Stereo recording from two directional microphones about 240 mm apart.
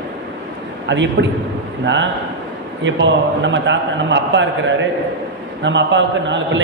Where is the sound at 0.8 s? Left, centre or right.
Right.